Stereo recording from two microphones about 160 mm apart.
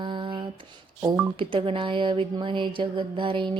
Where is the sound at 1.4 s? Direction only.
30° right (ahead or behind).